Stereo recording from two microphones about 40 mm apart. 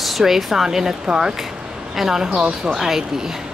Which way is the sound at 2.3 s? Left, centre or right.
Right.